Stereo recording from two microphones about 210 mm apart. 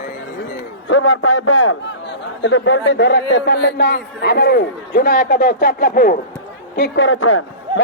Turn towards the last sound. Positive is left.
turn(degrees=75)  # may be behind; listen again after turning